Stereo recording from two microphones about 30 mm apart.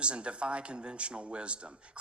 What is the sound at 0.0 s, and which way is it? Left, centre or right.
Speech, right.